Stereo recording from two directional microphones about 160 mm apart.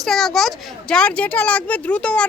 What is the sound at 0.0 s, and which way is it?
A child's voice, centre (ahead or behind).